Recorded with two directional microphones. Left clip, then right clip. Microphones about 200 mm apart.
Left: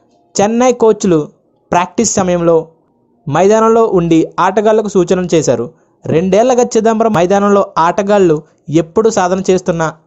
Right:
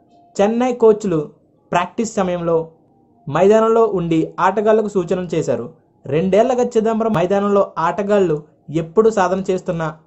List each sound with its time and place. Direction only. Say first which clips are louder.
0.3 s speech: left 6 dB; 40° left (ahead or behind)